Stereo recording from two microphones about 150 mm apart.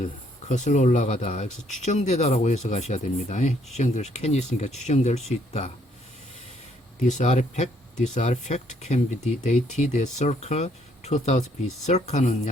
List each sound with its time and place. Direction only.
0.0 s speech: 55° left (ahead or behind)
7.1 s speech: 50° left (ahead or behind)